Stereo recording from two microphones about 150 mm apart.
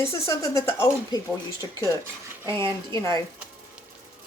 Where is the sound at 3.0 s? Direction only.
20° left (ahead or behind).